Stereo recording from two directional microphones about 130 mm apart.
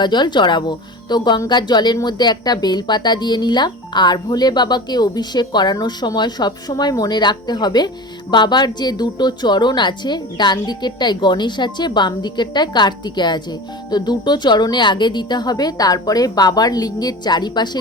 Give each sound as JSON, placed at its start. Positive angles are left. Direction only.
{"t": 0.0, "sound": "a woman's voice", "side_deg": 35}